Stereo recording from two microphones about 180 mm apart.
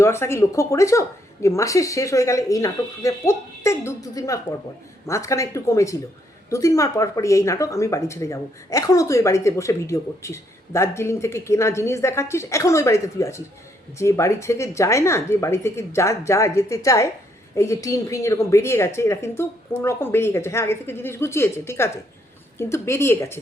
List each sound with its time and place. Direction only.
0.0 s speech: 15° left (ahead or behind)